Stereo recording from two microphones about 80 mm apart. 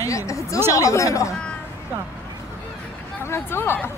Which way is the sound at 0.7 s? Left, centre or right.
Left.